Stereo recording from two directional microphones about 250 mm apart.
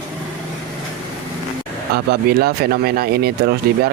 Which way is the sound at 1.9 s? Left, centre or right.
Right.